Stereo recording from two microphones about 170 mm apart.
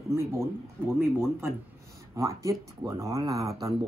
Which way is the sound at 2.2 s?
20° right (ahead or behind).